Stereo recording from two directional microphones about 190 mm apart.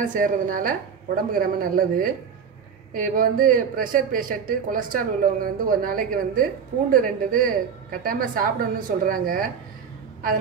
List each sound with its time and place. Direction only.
0.0 s speech: 45° right (ahead or behind)